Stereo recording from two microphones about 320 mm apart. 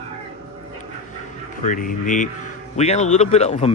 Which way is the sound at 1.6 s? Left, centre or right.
Left.